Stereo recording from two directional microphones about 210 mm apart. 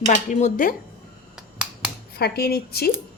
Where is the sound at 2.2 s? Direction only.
50° left (ahead or behind).